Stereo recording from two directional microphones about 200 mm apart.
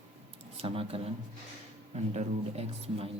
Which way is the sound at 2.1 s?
30° right (ahead or behind).